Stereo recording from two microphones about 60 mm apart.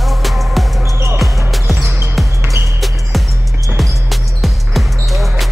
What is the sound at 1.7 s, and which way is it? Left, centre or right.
Music, right.